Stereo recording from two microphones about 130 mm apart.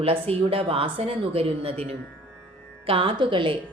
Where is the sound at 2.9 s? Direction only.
45° right (ahead or behind).